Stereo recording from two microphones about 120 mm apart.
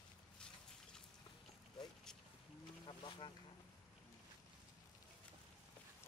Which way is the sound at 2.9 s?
45° left (ahead or behind).